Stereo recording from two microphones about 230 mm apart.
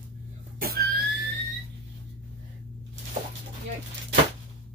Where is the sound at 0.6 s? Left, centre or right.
Right.